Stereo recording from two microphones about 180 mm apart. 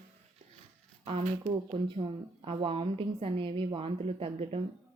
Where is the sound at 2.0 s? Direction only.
30° right (ahead or behind).